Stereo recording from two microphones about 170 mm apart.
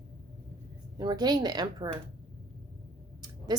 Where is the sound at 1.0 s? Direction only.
25° right (ahead or behind).